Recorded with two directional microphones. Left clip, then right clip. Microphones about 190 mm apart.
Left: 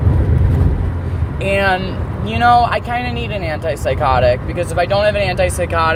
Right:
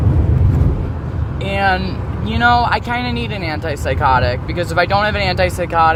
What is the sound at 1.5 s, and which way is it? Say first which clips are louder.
Speech: even; 15° right (ahead or behind).